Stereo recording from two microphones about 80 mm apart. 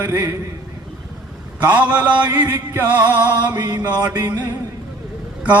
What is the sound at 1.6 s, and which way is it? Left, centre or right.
Speech, centre.